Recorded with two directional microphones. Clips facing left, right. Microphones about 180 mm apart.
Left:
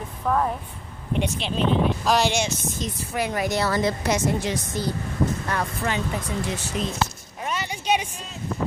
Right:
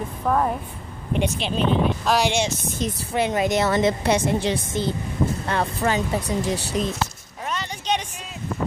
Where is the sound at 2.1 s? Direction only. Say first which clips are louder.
Even; centre (ahead or behind).